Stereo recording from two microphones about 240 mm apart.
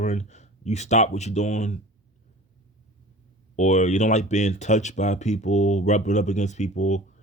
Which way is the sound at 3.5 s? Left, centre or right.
Left.